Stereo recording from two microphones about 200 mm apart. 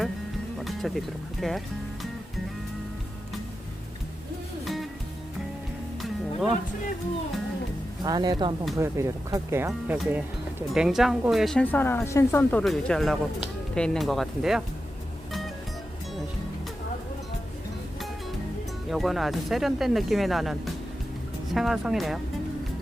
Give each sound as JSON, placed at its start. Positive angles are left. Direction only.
{"t": 0.6, "sound": "speech", "side_deg": 0}
{"t": 4.6, "sound": "music", "side_deg": 0}
{"t": 8.0, "sound": "a woman's voice", "side_deg": -20}
{"t": 18.9, "sound": "a woman's voice", "side_deg": 0}